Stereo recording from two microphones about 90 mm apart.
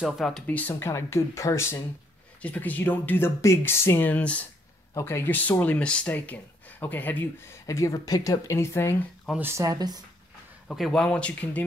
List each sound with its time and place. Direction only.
0.0 s speech: centre (ahead or behind)
0.5 s speech: 20° left (ahead or behind)
2.4 s speech: 15° left (ahead or behind)
4.9 s speech: 30° left (ahead or behind)
9.4 s speech: 30° right (ahead or behind)
10.7 s speech: 5° left (ahead or behind)